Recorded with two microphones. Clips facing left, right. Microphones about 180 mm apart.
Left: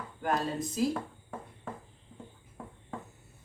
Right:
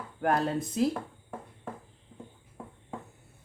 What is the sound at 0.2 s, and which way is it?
Speech, 60° right (ahead or behind).